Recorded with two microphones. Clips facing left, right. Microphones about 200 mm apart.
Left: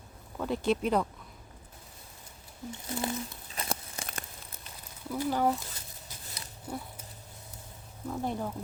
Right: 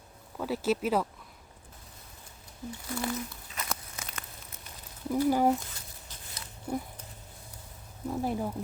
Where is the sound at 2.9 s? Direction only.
25° left (ahead or behind).